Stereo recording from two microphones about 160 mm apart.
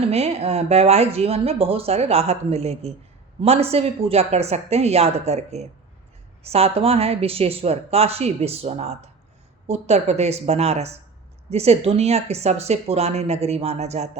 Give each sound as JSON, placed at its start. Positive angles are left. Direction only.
{"t": 0.0, "sound": "a woman's voice", "side_deg": -40}